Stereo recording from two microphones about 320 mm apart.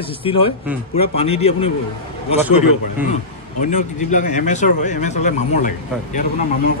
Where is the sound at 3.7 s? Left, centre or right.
Left.